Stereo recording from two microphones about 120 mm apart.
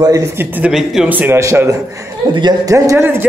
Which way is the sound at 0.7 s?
5° right (ahead or behind).